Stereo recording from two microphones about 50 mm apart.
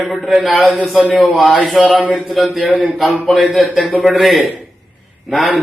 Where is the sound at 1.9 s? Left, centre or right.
Left.